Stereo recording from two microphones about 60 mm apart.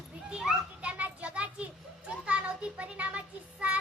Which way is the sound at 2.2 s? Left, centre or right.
Right.